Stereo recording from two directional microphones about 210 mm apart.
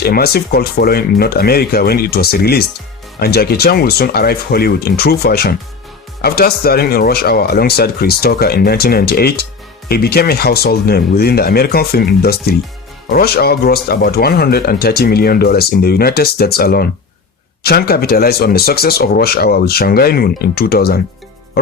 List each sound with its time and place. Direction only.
0.0 s speech: 50° left (ahead or behind)